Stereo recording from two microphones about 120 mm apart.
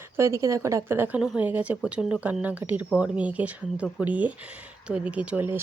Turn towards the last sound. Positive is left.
turn(degrees=-15)  # may be behind; listen again after turning